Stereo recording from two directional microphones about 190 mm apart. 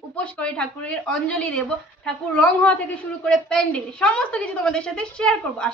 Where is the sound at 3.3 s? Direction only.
5° left (ahead or behind).